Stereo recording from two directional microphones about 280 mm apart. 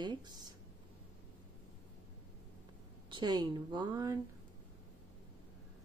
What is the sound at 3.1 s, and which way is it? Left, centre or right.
Speech, centre.